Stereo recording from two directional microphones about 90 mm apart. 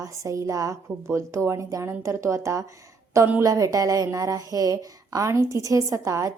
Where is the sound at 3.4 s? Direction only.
40° right (ahead or behind).